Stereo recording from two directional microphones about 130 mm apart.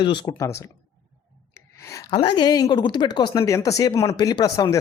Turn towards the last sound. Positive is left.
turn(degrees=25)  # may be behind; listen again after turning